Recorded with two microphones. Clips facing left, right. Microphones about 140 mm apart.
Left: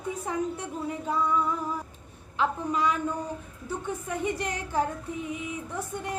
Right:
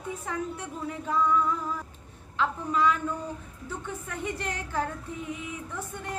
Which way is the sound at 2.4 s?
15° left (ahead or behind).